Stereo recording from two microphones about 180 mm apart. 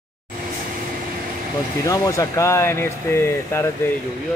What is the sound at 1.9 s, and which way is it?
Speech, 15° left (ahead or behind).